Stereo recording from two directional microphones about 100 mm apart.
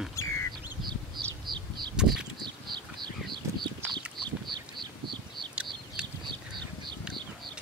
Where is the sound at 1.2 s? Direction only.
50° right (ahead or behind).